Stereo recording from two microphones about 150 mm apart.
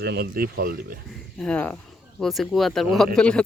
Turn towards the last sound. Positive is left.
turn(degrees=5)  # may be behind; listen again after turning